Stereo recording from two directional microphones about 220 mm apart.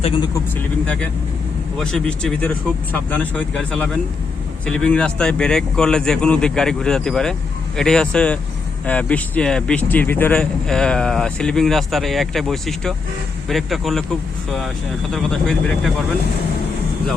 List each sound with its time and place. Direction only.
0.0 s speech: 20° left (ahead or behind)
0.9 s a man's voice: 5° left (ahead or behind)
15.1 s a man's voice: 5° left (ahead or behind)